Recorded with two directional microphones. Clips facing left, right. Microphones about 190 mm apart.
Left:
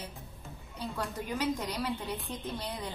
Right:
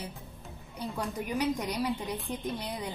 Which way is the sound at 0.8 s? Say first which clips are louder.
Right 2 dB; 15° right (ahead or behind).